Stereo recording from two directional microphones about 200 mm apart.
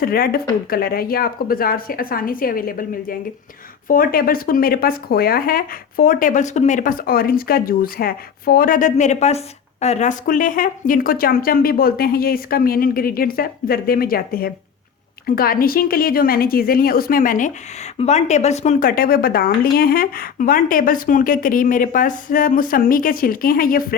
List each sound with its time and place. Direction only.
0.0 s speech: 50° left (ahead or behind)